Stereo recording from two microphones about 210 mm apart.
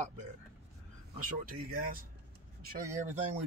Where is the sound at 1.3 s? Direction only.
45° right (ahead or behind).